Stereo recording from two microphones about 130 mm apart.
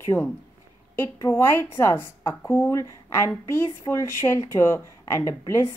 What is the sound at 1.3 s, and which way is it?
A woman's voice, 15° left (ahead or behind).